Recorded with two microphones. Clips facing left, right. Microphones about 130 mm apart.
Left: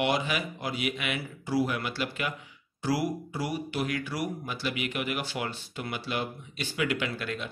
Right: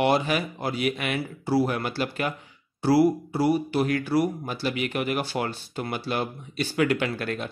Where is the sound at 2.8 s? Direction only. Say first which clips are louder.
Right 9 dB; 30° right (ahead or behind).